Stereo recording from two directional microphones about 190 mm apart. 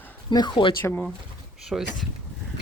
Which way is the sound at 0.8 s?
10° left (ahead or behind).